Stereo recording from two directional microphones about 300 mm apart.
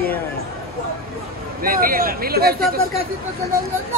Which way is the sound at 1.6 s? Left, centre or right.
Right.